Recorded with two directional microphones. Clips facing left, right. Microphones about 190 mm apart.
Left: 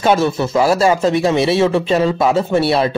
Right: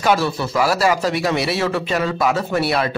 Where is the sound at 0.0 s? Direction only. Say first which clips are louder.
Left 4 dB; 25° left (ahead or behind).